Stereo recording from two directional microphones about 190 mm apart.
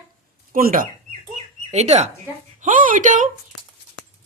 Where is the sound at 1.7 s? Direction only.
35° right (ahead or behind).